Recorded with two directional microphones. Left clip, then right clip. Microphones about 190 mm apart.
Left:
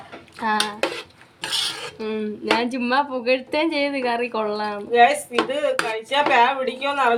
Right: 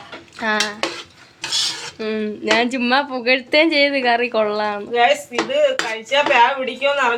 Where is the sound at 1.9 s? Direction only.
Centre (ahead or behind).